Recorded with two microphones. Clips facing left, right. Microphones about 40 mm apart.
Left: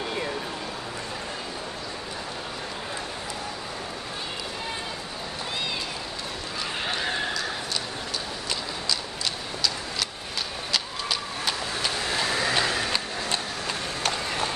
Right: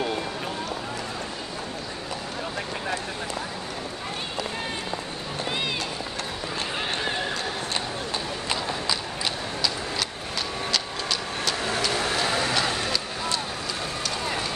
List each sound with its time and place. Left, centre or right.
8.5 s clip-clop: centre
10.7 s a sound: centre
12.5 s vehicle: left